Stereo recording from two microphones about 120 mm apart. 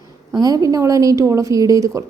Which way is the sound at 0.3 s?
30° right (ahead or behind).